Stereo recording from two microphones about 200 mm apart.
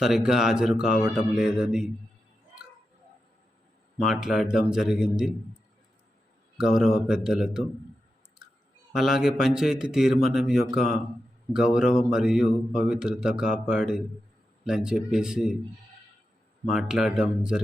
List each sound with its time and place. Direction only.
0.0 s a man's voice: centre (ahead or behind)
4.0 s a man's voice: centre (ahead or behind)
6.6 s a man's voice: 5° right (ahead or behind)
8.9 s a man's voice: centre (ahead or behind)
16.6 s a man's voice: 5° right (ahead or behind)